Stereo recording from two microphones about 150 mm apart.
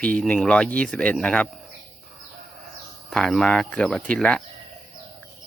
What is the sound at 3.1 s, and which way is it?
Speech, centre (ahead or behind).